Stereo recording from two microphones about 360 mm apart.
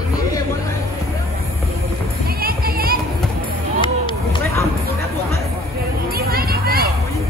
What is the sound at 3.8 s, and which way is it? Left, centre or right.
Run, centre.